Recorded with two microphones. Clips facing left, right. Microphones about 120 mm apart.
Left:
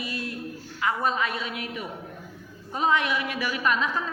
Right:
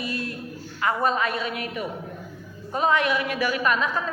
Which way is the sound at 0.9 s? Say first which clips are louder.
Right 3 dB; 50° right (ahead or behind).